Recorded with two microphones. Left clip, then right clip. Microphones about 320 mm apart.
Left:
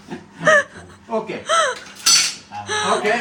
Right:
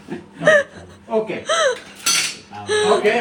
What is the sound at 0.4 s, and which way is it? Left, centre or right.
Gasp, left.